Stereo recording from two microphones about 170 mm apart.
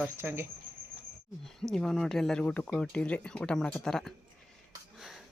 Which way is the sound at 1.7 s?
5° left (ahead or behind).